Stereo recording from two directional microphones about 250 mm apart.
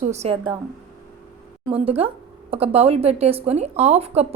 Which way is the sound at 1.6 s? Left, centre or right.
Right.